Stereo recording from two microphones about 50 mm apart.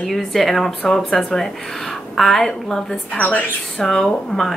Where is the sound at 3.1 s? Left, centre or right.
Left.